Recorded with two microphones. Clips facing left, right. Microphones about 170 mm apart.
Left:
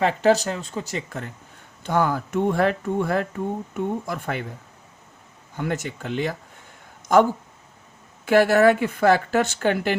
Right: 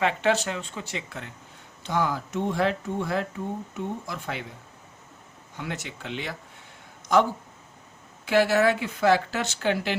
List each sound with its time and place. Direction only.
0.0 s speech: 40° left (ahead or behind)
5.5 s speech: 45° left (ahead or behind)